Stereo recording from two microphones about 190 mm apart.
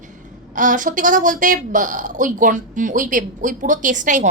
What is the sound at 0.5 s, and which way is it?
A woman's voice, 45° right (ahead or behind).